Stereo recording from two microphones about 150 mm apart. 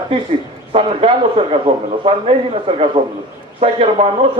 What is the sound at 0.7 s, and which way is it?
Speech, 40° right (ahead or behind).